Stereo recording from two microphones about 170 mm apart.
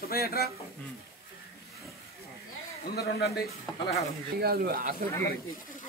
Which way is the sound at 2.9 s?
70° left (ahead or behind).